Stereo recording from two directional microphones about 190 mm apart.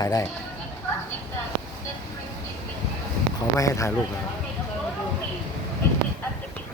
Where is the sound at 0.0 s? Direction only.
20° left (ahead or behind).